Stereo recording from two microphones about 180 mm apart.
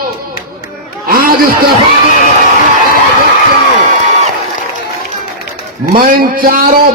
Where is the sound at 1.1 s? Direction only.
55° right (ahead or behind).